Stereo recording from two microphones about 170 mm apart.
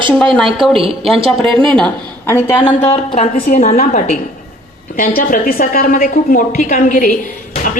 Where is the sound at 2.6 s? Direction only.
35° left (ahead or behind); by 7.8 s 50° left (ahead or behind).